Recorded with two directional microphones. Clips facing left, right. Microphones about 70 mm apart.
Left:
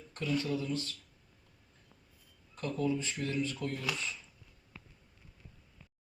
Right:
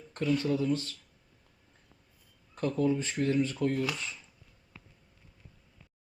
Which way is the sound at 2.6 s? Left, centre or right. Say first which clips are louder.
Right 5 dB; right.